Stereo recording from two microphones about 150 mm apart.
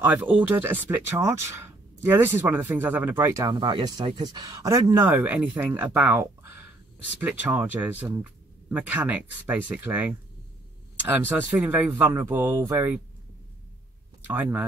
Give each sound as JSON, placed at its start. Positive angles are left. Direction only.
{"t": 0.0, "sound": "speech", "side_deg": -10}
{"t": 14.2, "sound": "speech", "side_deg": -10}